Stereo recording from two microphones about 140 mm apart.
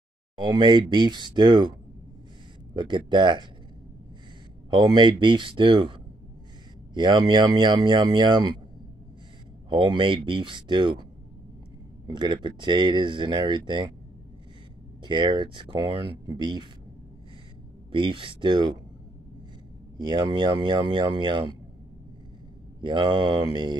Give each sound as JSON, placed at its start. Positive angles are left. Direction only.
{"t": 0.4, "sound": "speech", "side_deg": -35}
{"t": 4.6, "sound": "speech", "side_deg": -30}
{"t": 9.7, "sound": "speech", "side_deg": -35}
{"t": 12.1, "sound": "speech", "side_deg": -35}
{"t": 15.0, "sound": "speech", "side_deg": -35}
{"t": 17.9, "sound": "speech", "side_deg": -35}
{"t": 20.0, "sound": "speech", "side_deg": -30}
{"t": 22.8, "sound": "speech", "side_deg": -35}